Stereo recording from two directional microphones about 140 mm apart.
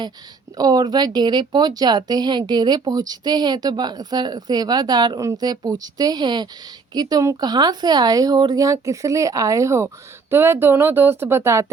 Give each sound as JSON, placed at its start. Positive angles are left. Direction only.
{"t": 0.5, "sound": "a woman's voice", "side_deg": -30}